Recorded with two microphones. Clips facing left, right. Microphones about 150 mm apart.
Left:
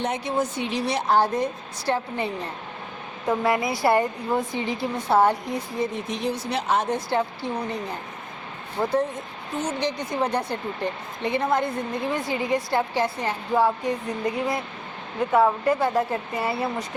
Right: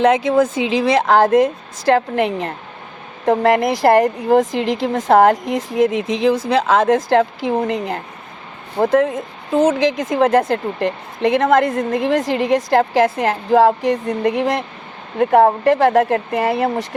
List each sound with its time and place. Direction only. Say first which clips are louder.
0.0 s a woman's voice: right 12 dB; 90° right